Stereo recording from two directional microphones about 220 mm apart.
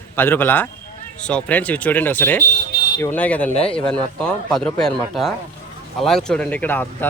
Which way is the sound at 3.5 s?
25° left (ahead or behind).